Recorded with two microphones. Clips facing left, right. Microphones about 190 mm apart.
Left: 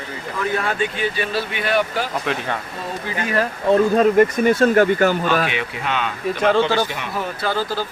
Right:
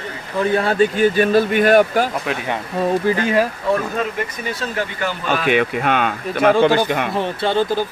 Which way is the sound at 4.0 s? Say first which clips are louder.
Left 10 dB; 50° left (ahead or behind).